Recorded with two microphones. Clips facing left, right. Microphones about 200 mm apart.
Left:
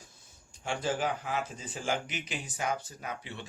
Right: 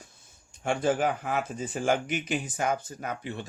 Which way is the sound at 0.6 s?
55° right (ahead or behind).